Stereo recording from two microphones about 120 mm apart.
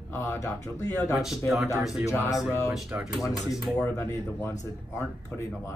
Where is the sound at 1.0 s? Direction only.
Centre (ahead or behind).